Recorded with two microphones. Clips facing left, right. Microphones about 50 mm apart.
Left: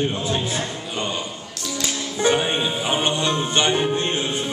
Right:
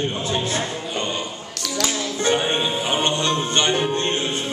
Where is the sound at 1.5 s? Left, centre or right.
Right.